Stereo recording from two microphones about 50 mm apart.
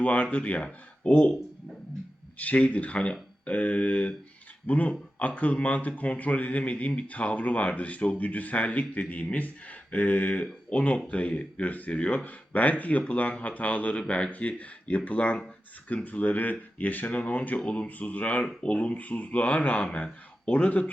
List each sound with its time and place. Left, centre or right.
0.0 s speech: left
2.4 s speech: left